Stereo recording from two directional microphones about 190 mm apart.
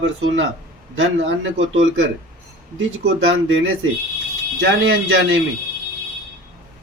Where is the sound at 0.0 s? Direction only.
90° right.